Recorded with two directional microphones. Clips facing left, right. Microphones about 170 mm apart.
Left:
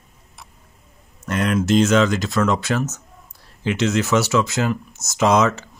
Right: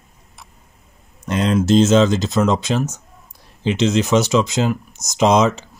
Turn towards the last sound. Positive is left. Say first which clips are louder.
# right 2 dB
turn(degrees=-20)  # may be behind; listen again after turning